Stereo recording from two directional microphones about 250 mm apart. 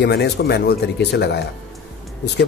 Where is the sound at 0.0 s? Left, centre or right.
Left.